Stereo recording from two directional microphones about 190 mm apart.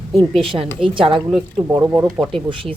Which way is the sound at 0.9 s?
25° right (ahead or behind).